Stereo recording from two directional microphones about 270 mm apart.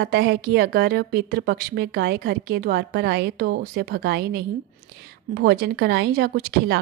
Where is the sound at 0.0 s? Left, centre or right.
Right.